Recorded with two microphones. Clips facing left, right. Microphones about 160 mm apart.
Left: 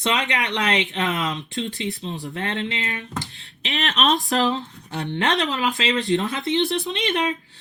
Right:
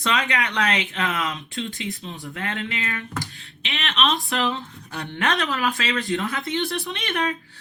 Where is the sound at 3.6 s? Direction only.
40° left (ahead or behind).